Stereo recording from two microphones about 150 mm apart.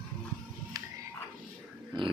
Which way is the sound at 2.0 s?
30° right (ahead or behind).